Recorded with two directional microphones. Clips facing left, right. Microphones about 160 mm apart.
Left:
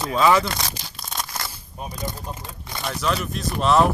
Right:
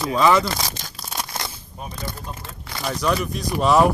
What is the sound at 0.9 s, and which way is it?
Tearing, 5° right (ahead or behind).